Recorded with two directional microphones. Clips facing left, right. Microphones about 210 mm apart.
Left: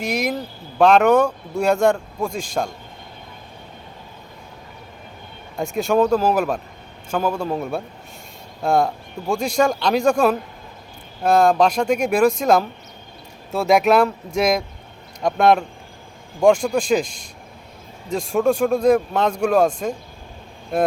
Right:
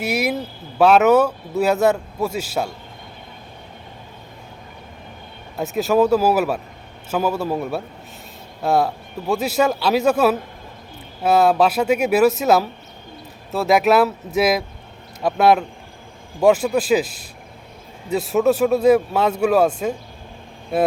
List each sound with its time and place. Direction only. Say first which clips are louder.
0.0 s speech: right 1 dB; 10° right (ahead or behind)
5.5 s speech: right 1 dB; 5° right (ahead or behind)